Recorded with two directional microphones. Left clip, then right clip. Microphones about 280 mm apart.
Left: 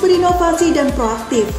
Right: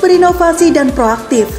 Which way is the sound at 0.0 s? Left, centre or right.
Right.